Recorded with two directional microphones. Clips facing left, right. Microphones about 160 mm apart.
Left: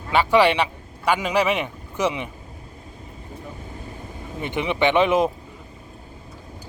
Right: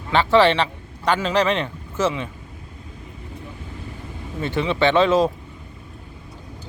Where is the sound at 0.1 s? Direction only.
10° left (ahead or behind).